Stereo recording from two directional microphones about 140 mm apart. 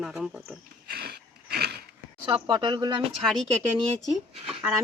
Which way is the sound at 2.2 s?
35° right (ahead or behind).